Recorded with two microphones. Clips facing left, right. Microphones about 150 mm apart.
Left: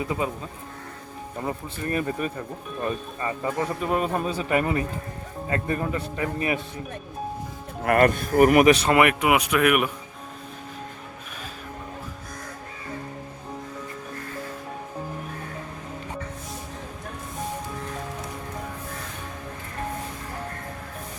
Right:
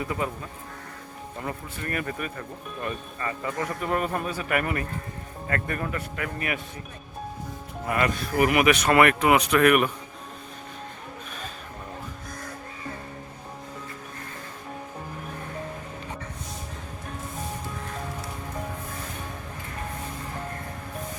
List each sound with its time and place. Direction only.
0.0 s a man's voice: 20° left (ahead or behind)
1.4 s a man's voice: 25° left (ahead or behind)
7.9 s speech: 50° left (ahead or behind); by 8.9 s 35° left (ahead or behind)
8.9 s speech: 15° left (ahead or behind)